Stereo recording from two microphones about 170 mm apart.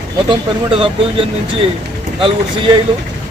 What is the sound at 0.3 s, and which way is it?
Speech, 30° right (ahead or behind).